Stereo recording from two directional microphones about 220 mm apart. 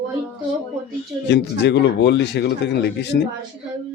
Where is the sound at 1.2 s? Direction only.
50° left (ahead or behind).